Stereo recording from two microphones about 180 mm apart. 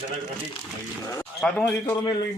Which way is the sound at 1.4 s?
Centre (ahead or behind).